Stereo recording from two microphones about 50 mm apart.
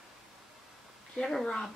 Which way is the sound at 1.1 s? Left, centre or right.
Centre.